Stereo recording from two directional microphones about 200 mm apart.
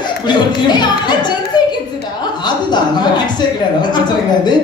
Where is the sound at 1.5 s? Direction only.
20° left (ahead or behind).